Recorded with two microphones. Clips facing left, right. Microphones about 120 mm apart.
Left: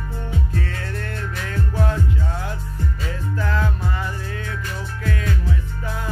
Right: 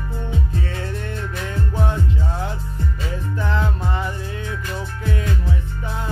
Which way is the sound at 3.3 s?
20° right (ahead or behind).